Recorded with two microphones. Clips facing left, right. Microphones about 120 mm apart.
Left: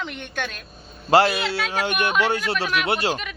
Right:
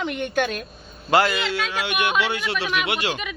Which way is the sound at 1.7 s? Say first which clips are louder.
Left 2 dB; 45° left (ahead or behind).